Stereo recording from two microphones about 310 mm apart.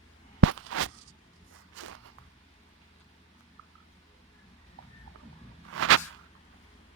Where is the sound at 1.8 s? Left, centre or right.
Right.